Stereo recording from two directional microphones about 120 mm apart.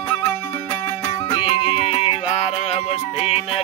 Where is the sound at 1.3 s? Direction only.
35° left (ahead or behind).